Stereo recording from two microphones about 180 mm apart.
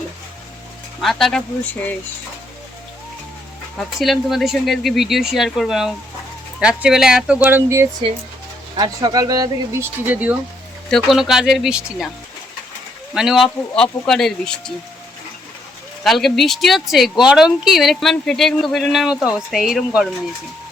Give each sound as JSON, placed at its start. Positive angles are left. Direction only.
{"t": 1.0, "sound": "speech", "side_deg": 5}
{"t": 3.8, "sound": "speech", "side_deg": 0}
{"t": 13.1, "sound": "speech", "side_deg": 0}
{"t": 16.0, "sound": "speech", "side_deg": 0}